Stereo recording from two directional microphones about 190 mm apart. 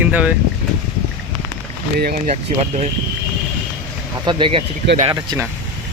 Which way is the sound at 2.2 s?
35° right (ahead or behind).